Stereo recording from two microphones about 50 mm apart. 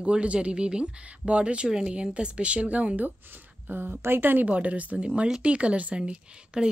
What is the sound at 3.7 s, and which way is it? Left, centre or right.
Speech, right.